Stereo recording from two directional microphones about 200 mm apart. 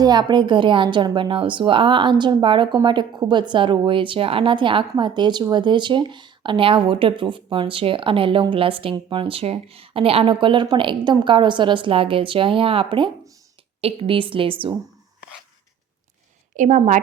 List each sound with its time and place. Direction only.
0.0 s a woman's voice: 20° right (ahead or behind)
16.6 s a woman's voice: 40° right (ahead or behind)